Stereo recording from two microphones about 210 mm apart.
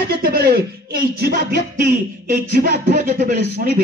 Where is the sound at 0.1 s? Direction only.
45° right (ahead or behind).